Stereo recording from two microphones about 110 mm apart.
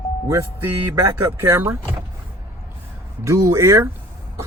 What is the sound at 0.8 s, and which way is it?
Speech, 20° right (ahead or behind).